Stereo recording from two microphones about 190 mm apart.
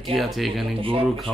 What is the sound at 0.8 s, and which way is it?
Speech, 30° right (ahead or behind).